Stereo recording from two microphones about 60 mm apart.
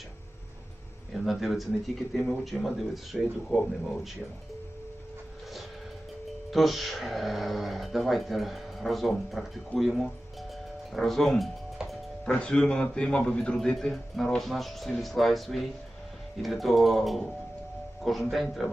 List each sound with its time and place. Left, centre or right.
1.1 s speech: centre
6.5 s speech: centre
12.2 s a man's voice: centre